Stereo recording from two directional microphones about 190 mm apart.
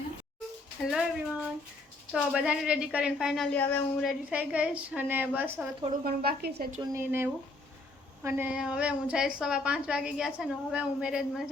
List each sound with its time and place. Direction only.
0.9 s a woman's voice: 5° right (ahead or behind)
4.1 s a woman's voice: 5° right (ahead or behind)
6.1 s a woman's voice: 55° right (ahead or behind)
6.7 s a woman's voice: 10° right (ahead or behind)